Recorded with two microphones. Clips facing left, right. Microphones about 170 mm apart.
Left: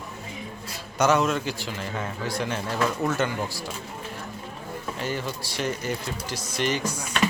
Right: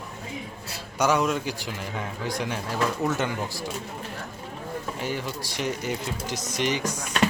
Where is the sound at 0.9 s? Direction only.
10° right (ahead or behind).